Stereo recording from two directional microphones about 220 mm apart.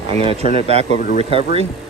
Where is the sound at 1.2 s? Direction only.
25° right (ahead or behind).